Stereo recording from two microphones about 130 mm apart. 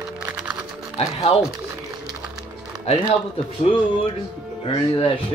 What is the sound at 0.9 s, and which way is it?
Speech, 55° left (ahead or behind).